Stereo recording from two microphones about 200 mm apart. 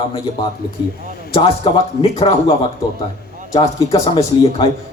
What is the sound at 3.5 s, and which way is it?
A man's voice, 25° left (ahead or behind).